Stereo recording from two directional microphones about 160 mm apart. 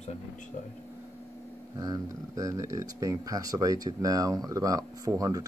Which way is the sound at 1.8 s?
20° right (ahead or behind).